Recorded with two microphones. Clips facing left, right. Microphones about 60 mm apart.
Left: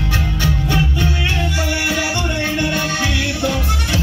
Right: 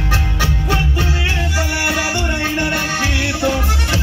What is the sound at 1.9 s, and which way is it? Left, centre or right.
Music, centre.